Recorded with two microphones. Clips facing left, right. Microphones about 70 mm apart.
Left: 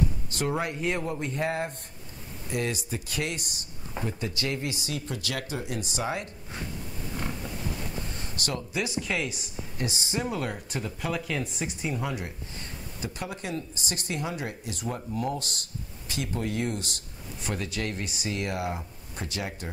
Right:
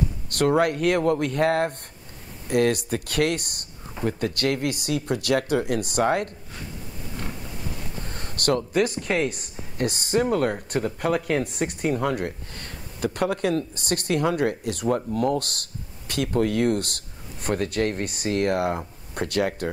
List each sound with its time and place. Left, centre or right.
0.3 s speech: right
8.1 s speech: right